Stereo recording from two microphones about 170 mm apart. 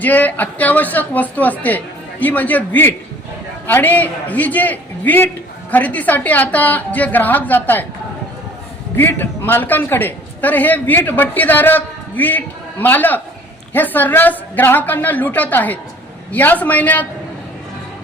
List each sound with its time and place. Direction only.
0.0 s a man's voice: 10° left (ahead or behind)
9.0 s a man's voice: 10° left (ahead or behind)